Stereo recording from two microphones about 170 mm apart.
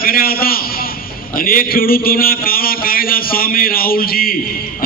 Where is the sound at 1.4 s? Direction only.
60° left (ahead or behind).